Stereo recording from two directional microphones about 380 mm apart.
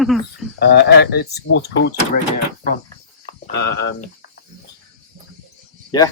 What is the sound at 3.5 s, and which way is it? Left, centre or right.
Speech, left.